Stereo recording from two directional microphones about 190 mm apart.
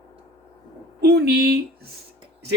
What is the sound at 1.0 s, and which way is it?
Speech, 60° right (ahead or behind).